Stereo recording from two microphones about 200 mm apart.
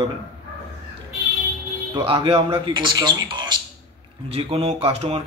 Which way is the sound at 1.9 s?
25° right (ahead or behind).